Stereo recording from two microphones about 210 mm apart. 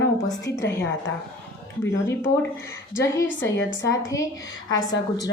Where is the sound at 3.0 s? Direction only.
10° left (ahead or behind).